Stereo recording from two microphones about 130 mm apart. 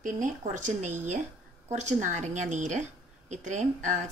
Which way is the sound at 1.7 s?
65° right (ahead or behind).